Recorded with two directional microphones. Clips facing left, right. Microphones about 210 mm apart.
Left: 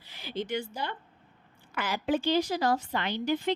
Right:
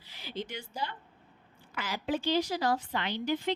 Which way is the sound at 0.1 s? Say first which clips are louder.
Left 6 dB; 55° left (ahead or behind).